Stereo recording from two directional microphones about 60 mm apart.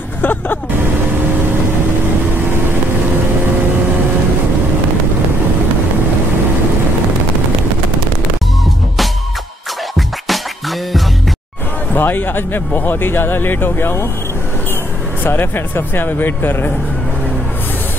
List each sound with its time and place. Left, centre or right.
0.2 s music: left
9.9 s music: centre
11.9 s speech: left
15.2 s speech: left